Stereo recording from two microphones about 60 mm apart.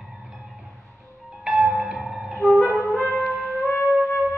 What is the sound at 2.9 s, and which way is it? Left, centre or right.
Music, left.